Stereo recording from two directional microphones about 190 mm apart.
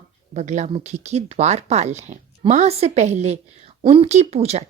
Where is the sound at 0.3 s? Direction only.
40° right (ahead or behind).